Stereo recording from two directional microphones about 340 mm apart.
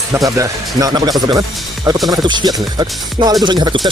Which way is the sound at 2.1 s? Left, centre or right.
Centre.